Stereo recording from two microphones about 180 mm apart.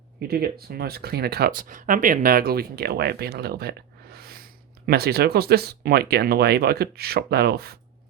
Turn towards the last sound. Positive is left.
turn(degrees=-60)  # may be behind; listen again after turning